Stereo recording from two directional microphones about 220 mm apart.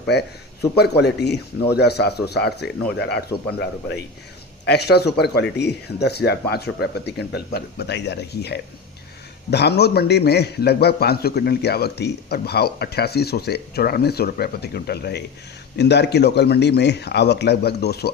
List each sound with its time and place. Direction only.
0.1 s a man's voice: 50° left (ahead or behind)